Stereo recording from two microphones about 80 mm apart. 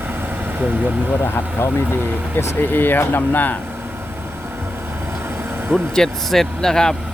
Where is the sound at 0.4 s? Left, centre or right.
Right.